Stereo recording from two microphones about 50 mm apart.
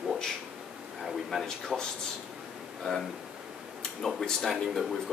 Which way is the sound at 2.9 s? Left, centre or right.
Centre.